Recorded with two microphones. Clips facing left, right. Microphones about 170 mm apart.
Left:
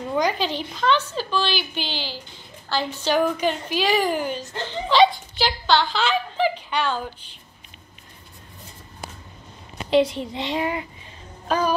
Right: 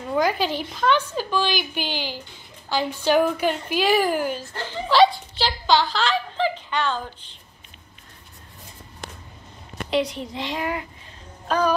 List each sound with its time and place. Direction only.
0.1 s a woman's voice: 10° right (ahead or behind); by 7.0 s 10° left (ahead or behind)
9.8 s a woman's voice: 30° left (ahead or behind)
11.4 s speech: 5° left (ahead or behind)